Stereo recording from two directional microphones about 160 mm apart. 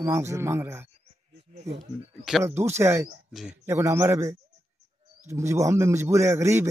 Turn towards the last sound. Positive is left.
turn(degrees=-15)  # may be behind; listen again after turning